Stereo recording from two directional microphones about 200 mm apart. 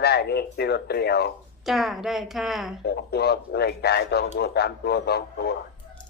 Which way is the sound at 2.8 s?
55° left (ahead or behind).